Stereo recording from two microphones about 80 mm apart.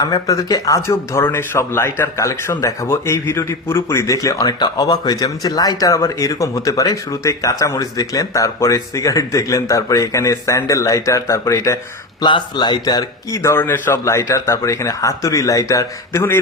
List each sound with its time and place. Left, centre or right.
0.0 s speech: left
4.6 s speech: left
12.2 s speech: left
13.6 s speech: left
16.1 s speech: left